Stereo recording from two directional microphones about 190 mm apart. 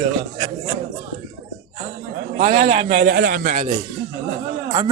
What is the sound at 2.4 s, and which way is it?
Speech, 35° right (ahead or behind).